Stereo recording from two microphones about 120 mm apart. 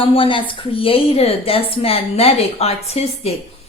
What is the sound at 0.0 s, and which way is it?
A woman's voice, 50° left (ahead or behind).